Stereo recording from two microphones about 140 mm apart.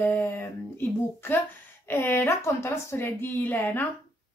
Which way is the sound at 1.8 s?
15° left (ahead or behind).